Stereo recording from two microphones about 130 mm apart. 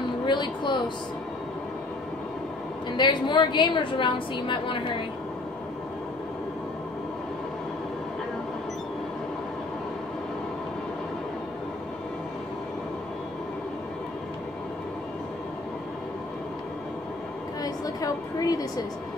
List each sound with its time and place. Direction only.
0.3 s a woman's voice: 35° left (ahead or behind)
3.0 s a woman's voice: 35° left (ahead or behind)
17.6 s a sound: 30° left (ahead or behind)